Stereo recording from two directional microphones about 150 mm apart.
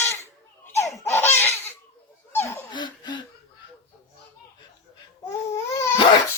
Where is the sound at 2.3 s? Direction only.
15° left (ahead or behind).